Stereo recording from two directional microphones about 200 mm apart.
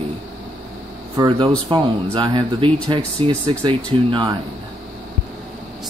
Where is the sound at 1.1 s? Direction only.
20° right (ahead or behind).